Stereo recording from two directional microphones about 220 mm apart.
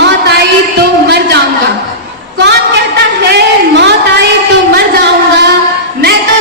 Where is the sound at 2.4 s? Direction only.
50° right (ahead or behind).